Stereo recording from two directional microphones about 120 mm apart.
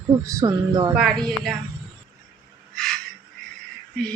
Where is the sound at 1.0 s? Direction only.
Centre (ahead or behind).